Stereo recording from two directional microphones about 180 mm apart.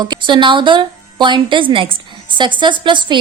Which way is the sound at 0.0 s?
25° right (ahead or behind).